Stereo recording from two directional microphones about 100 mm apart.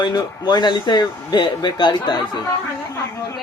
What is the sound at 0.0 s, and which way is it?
Speech, 45° left (ahead or behind).